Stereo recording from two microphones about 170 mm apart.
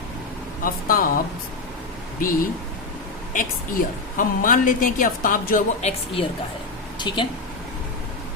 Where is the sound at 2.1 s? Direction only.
55° left (ahead or behind).